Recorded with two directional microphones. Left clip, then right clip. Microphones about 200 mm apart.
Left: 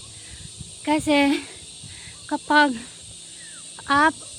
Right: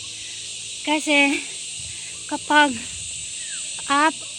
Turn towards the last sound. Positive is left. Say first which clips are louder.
# even
turn(degrees=10)  # may be behind; listen again after turning